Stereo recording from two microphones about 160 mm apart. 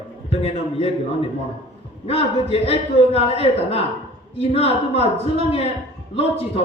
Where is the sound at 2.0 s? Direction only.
40° left (ahead or behind).